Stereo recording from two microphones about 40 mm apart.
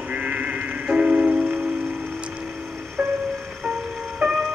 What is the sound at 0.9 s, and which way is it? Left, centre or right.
Music, right.